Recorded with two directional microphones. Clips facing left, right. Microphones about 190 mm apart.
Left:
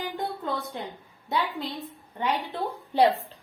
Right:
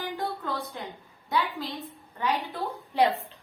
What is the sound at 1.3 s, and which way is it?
A woman's voice, 25° left (ahead or behind).